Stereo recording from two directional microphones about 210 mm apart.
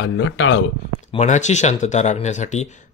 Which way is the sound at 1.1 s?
35° left (ahead or behind).